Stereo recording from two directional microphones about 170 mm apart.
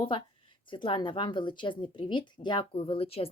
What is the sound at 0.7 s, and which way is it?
Speech, 30° left (ahead or behind).